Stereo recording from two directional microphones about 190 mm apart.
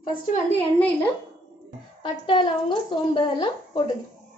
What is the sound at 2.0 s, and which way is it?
A woman's voice, 25° left (ahead or behind).